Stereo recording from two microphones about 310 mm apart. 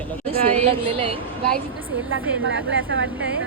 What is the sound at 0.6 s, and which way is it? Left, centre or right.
Speech, centre.